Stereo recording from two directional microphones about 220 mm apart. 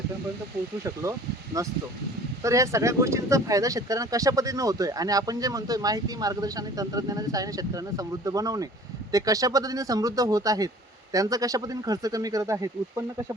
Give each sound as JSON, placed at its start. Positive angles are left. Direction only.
{"t": 1.6, "sound": "speech", "side_deg": -15}